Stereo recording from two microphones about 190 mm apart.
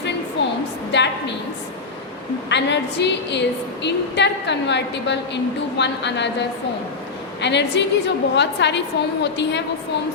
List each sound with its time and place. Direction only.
0.4 s a sound: 65° left (ahead or behind)
2.5 s a woman's voice: 65° left (ahead or behind)
7.4 s a woman's voice: 65° left (ahead or behind)